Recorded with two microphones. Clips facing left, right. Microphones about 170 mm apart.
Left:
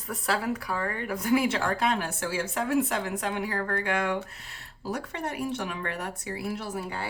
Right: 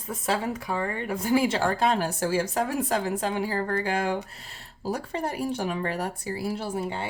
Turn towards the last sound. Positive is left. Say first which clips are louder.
# right 3 dB
turn(degrees=-25)  # may be behind; listen again after turning